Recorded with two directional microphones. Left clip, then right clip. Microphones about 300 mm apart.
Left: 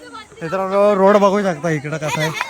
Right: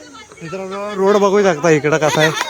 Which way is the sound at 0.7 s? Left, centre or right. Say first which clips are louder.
Left 13 dB; left.